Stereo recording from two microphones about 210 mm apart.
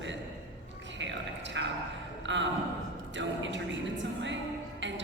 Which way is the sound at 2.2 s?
60° right (ahead or behind).